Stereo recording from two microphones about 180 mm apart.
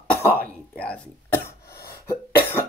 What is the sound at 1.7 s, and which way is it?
Cough, 55° left (ahead or behind).